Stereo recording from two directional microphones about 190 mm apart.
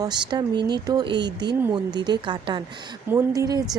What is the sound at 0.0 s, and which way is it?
Speech, 25° right (ahead or behind).